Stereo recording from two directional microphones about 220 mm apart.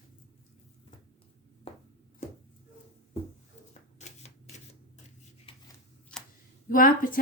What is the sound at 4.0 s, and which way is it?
Shuffling cards, 30° left (ahead or behind).